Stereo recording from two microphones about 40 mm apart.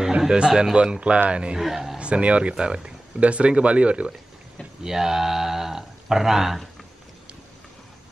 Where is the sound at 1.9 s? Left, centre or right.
Right.